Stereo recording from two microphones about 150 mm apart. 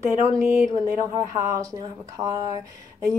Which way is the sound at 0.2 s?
20° right (ahead or behind).